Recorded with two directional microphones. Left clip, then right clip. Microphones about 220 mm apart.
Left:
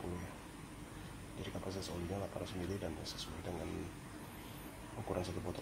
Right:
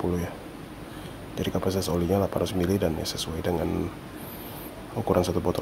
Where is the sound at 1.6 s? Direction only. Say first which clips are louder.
Right 18 dB; 40° right (ahead or behind).